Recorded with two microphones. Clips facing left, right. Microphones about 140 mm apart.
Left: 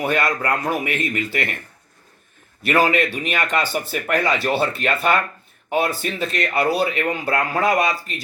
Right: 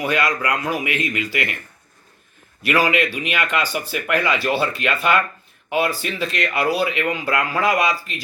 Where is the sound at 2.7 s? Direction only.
50° left (ahead or behind).